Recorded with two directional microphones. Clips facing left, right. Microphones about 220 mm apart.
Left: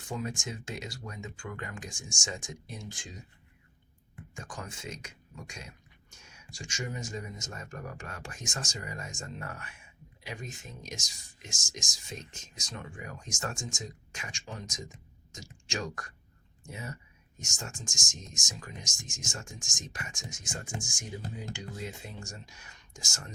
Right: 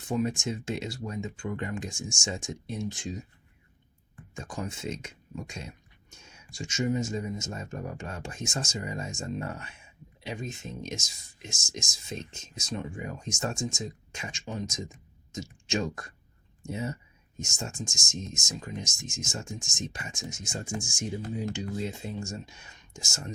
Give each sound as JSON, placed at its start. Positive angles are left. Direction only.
{"t": 0.1, "sound": "speech", "side_deg": -25}
{"t": 4.4, "sound": "speech", "side_deg": -25}